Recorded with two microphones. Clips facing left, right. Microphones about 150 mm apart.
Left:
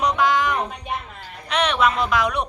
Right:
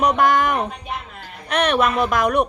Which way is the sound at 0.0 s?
50° right (ahead or behind).